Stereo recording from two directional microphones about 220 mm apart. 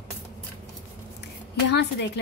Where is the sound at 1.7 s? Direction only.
50° left (ahead or behind).